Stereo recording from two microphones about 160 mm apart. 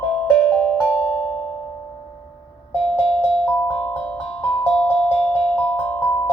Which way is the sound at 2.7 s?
10° left (ahead or behind).